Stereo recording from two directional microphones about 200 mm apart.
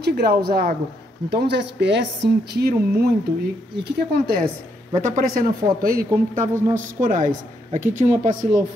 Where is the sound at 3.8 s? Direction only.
55° right (ahead or behind); by 8.5 s 40° right (ahead or behind).